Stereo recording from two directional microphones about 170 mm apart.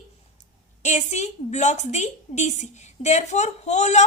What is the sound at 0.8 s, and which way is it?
A woman's voice, 40° left (ahead or behind).